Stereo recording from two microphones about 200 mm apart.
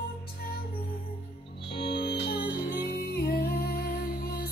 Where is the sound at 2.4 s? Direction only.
10° right (ahead or behind).